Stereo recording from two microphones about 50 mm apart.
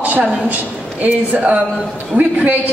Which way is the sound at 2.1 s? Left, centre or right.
Right.